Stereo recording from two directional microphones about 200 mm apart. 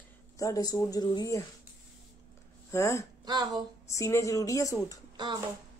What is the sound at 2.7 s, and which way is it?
Speech, 15° left (ahead or behind).